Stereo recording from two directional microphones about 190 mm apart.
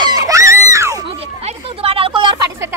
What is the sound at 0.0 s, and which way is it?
Music, 20° right (ahead or behind).